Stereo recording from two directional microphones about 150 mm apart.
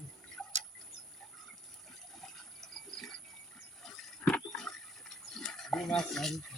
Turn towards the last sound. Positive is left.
turn(degrees=0)  # may be behind; listen again after turning